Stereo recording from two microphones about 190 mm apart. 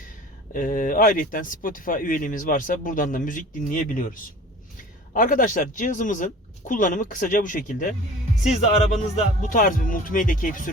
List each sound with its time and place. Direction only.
0.5 s speech: 45° left (ahead or behind)